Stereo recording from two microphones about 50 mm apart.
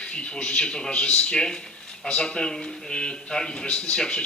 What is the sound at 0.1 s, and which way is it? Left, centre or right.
A man's voice, left.